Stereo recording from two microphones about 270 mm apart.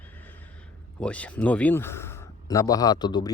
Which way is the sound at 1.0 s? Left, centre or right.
Centre.